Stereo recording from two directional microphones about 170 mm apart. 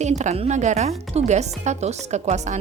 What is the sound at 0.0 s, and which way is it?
Speech, 40° right (ahead or behind).